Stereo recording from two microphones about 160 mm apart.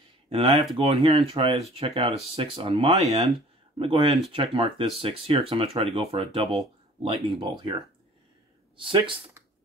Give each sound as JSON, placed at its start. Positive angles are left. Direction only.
{"t": 0.3, "sound": "speech", "side_deg": -35}
{"t": 3.0, "sound": "speech", "side_deg": -20}
{"t": 3.7, "sound": "speech", "side_deg": -35}
{"t": 8.7, "sound": "speech", "side_deg": -30}